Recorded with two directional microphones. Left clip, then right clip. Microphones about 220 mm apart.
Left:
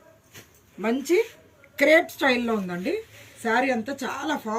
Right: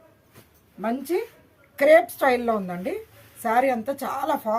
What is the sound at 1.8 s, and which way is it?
A woman's voice, 35° right (ahead or behind).